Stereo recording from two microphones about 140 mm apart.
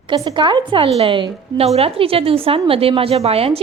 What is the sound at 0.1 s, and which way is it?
A woman's voice, 35° right (ahead or behind).